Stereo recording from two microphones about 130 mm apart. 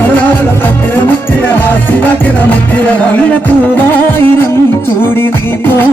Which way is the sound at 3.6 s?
15° left (ahead or behind).